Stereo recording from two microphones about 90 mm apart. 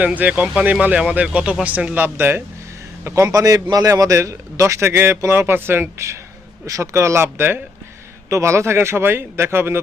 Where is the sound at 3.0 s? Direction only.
35° right (ahead or behind).